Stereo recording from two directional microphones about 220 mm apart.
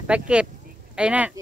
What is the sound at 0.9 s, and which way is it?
Speech, 5° right (ahead or behind).